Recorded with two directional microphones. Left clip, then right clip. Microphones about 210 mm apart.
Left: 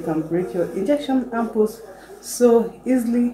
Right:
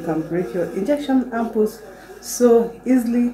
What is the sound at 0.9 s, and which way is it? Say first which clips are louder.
A woman's voice: right 2 dB; centre (ahead or behind).